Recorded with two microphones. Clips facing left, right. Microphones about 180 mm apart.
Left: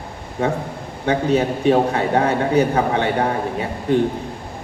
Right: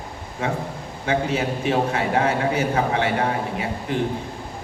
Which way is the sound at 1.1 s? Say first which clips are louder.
Left 5 dB; 35° left (ahead or behind).